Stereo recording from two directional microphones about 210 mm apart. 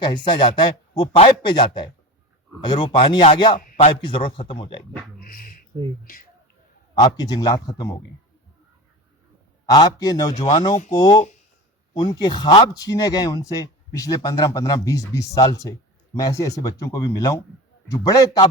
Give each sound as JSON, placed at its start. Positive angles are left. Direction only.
{"t": 0.3, "sound": "a man's voice", "side_deg": 20}
{"t": 3.6, "sound": "a man's voice", "side_deg": 35}
{"t": 5.2, "sound": "speech", "side_deg": 45}
{"t": 7.0, "sound": "a man's voice", "side_deg": 20}
{"t": 9.6, "sound": "a man's voice", "side_deg": 20}